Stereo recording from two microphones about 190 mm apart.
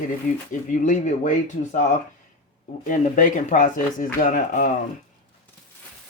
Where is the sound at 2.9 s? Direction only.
45° left (ahead or behind).